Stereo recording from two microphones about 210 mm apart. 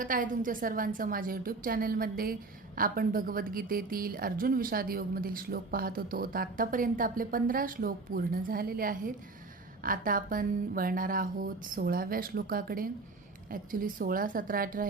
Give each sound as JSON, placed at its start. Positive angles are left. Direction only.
{"t": 0.0, "sound": "a woman's voice", "side_deg": -40}